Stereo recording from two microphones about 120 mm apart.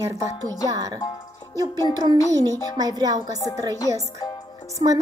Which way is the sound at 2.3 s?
30° right (ahead or behind).